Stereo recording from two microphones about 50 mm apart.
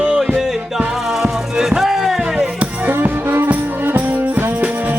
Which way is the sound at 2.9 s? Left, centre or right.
Right.